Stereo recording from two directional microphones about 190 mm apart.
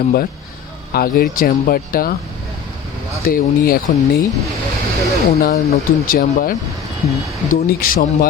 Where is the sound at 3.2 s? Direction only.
50° left (ahead or behind).